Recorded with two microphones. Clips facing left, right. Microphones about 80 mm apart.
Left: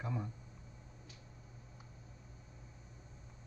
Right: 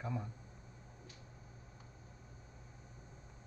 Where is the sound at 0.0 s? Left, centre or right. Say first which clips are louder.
Left 1 dB; centre.